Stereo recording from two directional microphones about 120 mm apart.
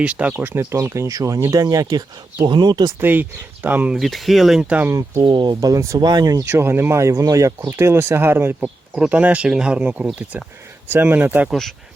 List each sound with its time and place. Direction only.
0.0 s speech: 10° right (ahead or behind)
0.3 s speech: 20° right (ahead or behind); by 2.9 s 35° right (ahead or behind)
3.0 s speech: 15° right (ahead or behind)
3.9 s speech: centre (ahead or behind)
4.8 s speech: 25° right (ahead or behind)
5.2 s speech: 40° right (ahead or behind)
5.5 s speech: 25° right (ahead or behind)
6.6 s speech: 20° right (ahead or behind)
11.4 s speech: 5° left (ahead or behind)